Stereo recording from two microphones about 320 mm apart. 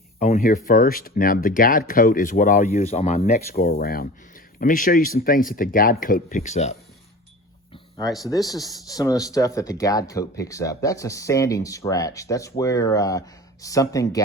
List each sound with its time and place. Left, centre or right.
0.2 s speech: left
7.7 s a sound: centre
8.2 s speech: centre